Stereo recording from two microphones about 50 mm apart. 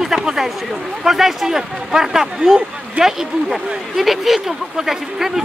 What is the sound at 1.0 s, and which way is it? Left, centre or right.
Speech, centre.